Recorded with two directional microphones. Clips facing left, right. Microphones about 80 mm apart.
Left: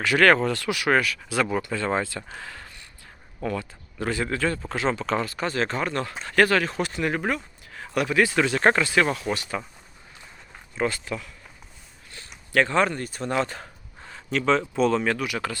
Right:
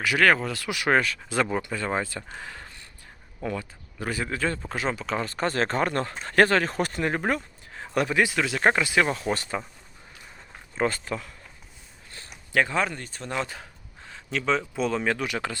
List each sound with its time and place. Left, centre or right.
0.0 s speech: centre
0.7 s speech: right
2.4 s a sound: right
3.4 s speech: centre
4.9 s speech: centre
5.2 s speech: right
7.0 s speech: right
7.8 s a sound: right
8.4 s speech: centre
9.1 s speech: right
10.8 s speech: right
12.5 s speech: centre
12.8 s speech: centre
15.2 s speech: right